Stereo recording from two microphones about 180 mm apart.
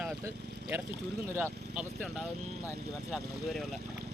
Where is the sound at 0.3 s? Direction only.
65° right (ahead or behind).